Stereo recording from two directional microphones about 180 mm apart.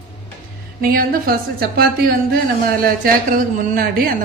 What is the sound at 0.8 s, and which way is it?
A woman's voice, 55° right (ahead or behind).